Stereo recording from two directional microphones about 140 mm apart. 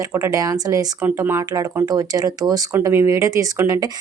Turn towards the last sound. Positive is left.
turn(degrees=-20)  # may be behind; listen again after turning